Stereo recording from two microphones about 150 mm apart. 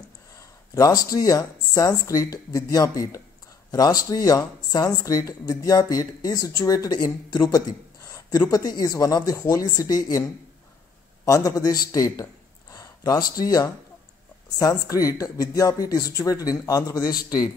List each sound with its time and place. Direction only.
0.4 s speech: 20° left (ahead or behind)
11.2 s a man's voice: 25° left (ahead or behind)